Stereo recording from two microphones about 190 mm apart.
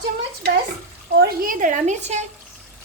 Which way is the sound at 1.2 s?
45° right (ahead or behind).